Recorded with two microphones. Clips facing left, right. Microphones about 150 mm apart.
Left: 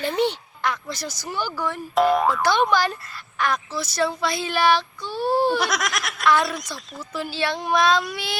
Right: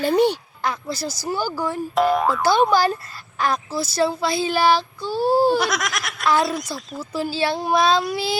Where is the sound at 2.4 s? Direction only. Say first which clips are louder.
Right 3 dB; 35° right (ahead or behind).